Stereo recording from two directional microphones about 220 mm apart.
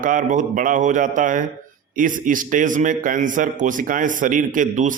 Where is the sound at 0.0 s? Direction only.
35° right (ahead or behind).